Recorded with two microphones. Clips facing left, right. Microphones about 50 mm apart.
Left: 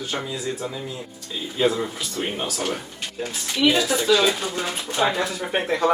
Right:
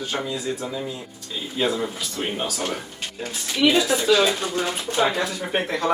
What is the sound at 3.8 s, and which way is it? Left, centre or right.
Speech, centre.